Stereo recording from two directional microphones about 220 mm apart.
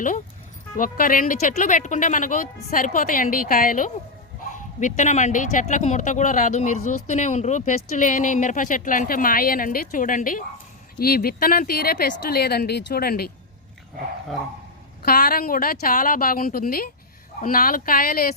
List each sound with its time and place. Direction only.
0.8 s speech: 40° left (ahead or behind)
15.0 s speech: 45° left (ahead or behind)